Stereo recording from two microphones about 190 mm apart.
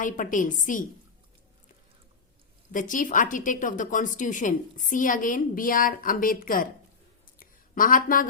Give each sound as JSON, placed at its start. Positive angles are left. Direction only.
{"t": 0.0, "sound": "a woman's voice", "side_deg": 45}
{"t": 2.7, "sound": "a woman's voice", "side_deg": 45}
{"t": 7.3, "sound": "a sound", "side_deg": 45}